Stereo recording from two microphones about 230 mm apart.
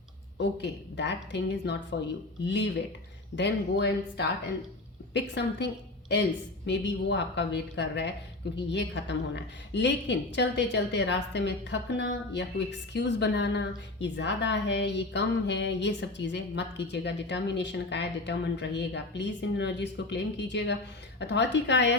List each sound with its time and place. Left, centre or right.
0.3 s a woman's voice: left
5.3 s a woman's voice: left